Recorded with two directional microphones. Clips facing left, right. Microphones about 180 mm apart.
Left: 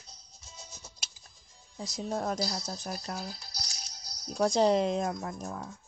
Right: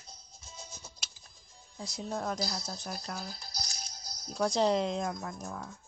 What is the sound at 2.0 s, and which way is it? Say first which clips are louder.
Speech: left 3 dB; 25° left (ahead or behind).